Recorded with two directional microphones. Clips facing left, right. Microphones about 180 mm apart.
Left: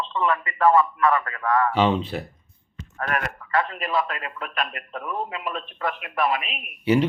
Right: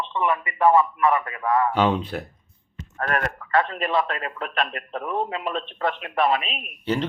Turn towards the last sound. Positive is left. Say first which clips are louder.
# left 5 dB
turn(degrees=10)  # may be behind; listen again after turning